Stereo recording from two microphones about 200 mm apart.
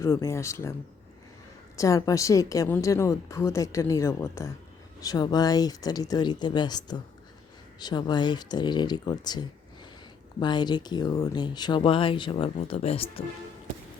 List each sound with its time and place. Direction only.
0.0 s a woman's voice: 15° left (ahead or behind); by 13.2 s 30° left (ahead or behind)